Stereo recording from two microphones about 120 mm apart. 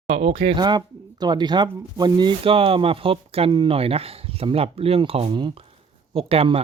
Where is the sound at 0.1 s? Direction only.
55° right (ahead or behind).